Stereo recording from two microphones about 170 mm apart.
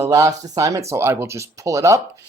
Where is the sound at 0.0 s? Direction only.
20° right (ahead or behind).